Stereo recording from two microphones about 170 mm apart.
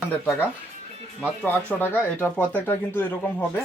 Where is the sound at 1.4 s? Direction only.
10° left (ahead or behind).